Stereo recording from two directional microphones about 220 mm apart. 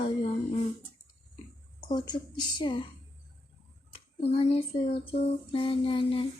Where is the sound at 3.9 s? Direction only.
25° left (ahead or behind).